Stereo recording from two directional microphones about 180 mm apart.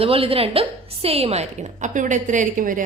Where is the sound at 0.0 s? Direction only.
30° right (ahead or behind).